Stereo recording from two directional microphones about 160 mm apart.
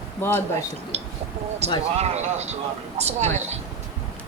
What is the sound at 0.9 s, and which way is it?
Speech, 40° right (ahead or behind).